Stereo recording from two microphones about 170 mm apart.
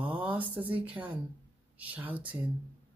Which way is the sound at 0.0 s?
10° right (ahead or behind).